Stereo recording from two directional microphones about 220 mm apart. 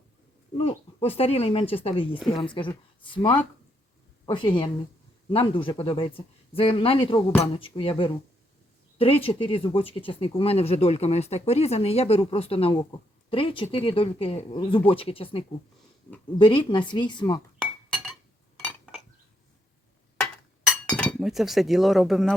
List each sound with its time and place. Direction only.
0.5 s speech: 25° left (ahead or behind)
18.6 s cutlery: centre (ahead or behind)
20.7 s chink: 5° left (ahead or behind)